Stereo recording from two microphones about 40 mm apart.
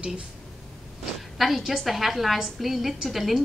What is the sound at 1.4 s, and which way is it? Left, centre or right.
A woman's voice, centre.